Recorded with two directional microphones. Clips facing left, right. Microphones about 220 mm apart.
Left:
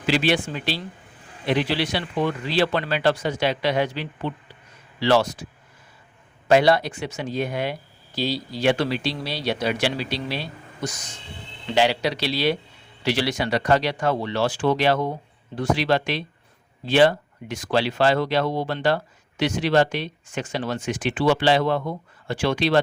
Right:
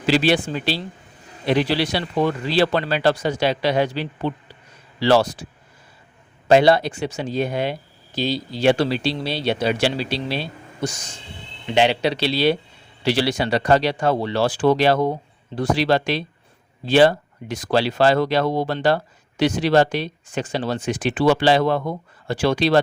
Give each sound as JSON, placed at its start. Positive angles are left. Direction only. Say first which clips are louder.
{"t": 0.0, "sound": "speech", "louder": "right 3 dB", "side_deg": -35}
{"t": 6.5, "sound": "speech", "louder": "right 3 dB", "side_deg": -25}